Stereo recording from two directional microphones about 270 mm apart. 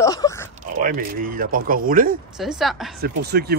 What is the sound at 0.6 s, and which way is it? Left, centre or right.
Speech, right.